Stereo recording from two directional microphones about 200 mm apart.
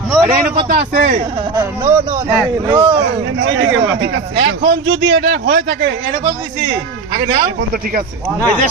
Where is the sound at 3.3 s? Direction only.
65° right (ahead or behind).